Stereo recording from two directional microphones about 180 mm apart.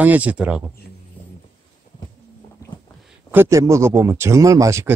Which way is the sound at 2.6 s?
15° left (ahead or behind).